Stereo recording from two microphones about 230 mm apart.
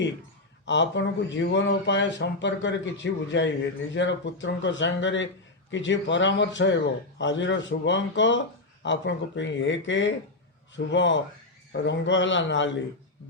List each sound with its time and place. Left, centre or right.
0.6 s speech: left